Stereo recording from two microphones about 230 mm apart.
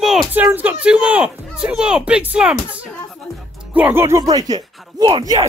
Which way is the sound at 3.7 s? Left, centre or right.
Centre.